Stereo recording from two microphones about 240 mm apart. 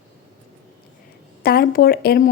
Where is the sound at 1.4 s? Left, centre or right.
Left.